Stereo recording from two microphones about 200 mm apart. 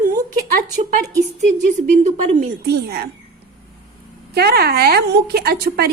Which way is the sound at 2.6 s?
50° right (ahead or behind).